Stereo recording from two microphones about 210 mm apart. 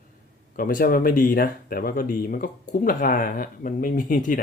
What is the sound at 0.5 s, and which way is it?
Speech, 40° left (ahead or behind).